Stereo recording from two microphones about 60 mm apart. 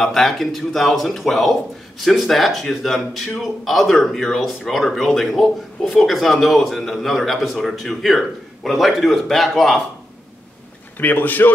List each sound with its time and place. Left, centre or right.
0.0 s speech: centre
11.0 s speech: left